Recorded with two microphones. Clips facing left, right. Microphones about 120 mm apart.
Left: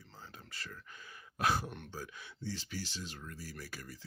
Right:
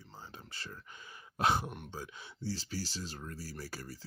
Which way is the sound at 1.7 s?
10° right (ahead or behind).